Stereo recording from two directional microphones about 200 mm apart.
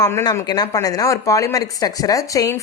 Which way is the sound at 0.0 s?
15° left (ahead or behind).